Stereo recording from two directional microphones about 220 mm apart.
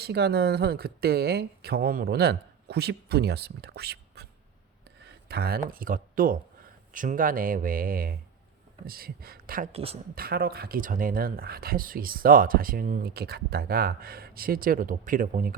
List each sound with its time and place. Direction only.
0.0 s speech: 50° right (ahead or behind)
5.3 s speech: 45° right (ahead or behind)
9.7 s speech: 25° right (ahead or behind)
10.2 s speech: 45° right (ahead or behind)